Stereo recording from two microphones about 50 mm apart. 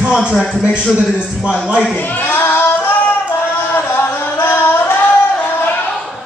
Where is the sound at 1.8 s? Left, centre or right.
Left.